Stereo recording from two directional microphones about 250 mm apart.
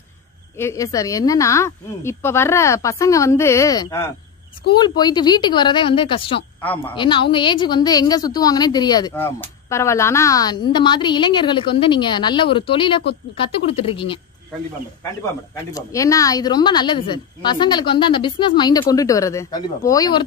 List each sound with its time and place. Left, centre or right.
0.6 s a woman's voice: centre
6.6 s a woman's voice: centre
6.9 s a woman's voice: centre
15.5 s a woman's voice: centre